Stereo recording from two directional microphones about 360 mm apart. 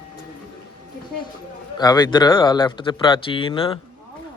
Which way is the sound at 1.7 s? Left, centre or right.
Centre.